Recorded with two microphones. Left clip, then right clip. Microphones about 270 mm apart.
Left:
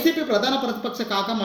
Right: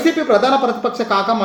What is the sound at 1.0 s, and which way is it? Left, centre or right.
Speech, right.